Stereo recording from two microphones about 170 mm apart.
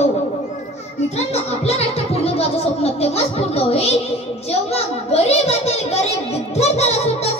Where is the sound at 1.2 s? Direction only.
40° left (ahead or behind).